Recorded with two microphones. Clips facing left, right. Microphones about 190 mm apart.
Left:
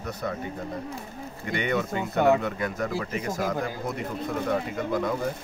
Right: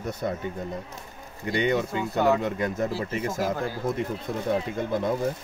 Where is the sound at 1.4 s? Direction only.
20° right (ahead or behind).